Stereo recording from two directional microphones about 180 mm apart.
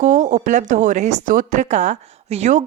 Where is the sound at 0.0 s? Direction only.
45° right (ahead or behind).